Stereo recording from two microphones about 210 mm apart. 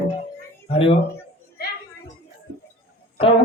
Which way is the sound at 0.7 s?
25° left (ahead or behind).